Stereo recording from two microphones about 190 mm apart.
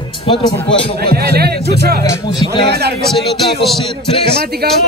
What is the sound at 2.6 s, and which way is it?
Speech, 60° right (ahead or behind).